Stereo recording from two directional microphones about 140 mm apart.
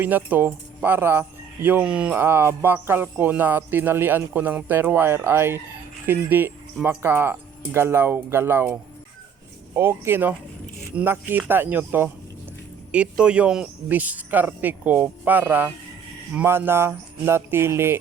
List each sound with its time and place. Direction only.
0.0 s speech: 10° right (ahead or behind)